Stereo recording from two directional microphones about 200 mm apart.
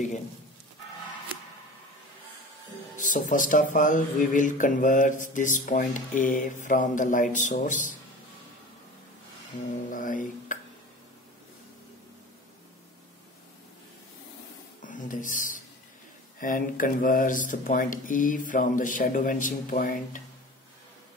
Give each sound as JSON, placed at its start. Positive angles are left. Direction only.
{"t": 3.0, "sound": "speech", "side_deg": 40}
{"t": 9.8, "sound": "speech", "side_deg": 40}
{"t": 14.8, "sound": "a sound", "side_deg": 40}
{"t": 16.3, "sound": "speech", "side_deg": 45}